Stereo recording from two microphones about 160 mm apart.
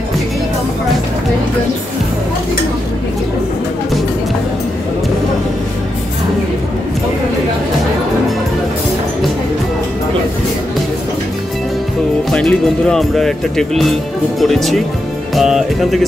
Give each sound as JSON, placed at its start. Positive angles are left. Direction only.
{"t": 12.3, "sound": "speech", "side_deg": 5}
{"t": 14.4, "sound": "music", "side_deg": 0}